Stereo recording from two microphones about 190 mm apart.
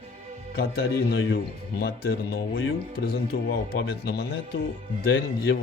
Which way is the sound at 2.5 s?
90° left.